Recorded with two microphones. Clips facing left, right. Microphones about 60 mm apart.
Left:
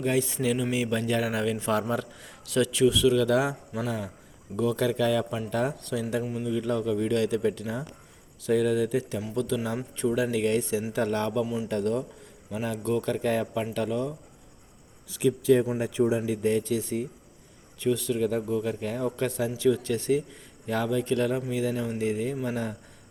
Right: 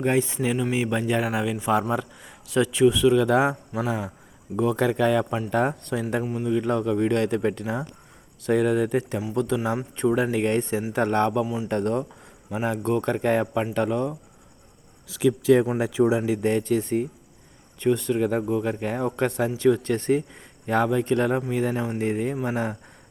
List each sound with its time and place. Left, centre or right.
0.0 s a man's voice: right
0.3 s speech: centre
0.7 s a man's voice: right
6.2 s speech: right
6.5 s a man's voice: right
15.1 s speech: right
15.8 s a man's voice: right